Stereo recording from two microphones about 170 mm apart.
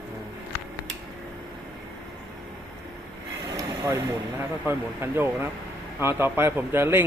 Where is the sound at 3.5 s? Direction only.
15° right (ahead or behind).